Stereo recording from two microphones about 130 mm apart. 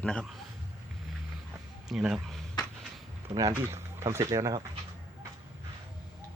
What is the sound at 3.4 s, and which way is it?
Speech, 25° right (ahead or behind).